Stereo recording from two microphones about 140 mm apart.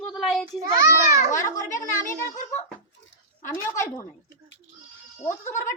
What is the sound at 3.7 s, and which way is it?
Speech, 20° left (ahead or behind).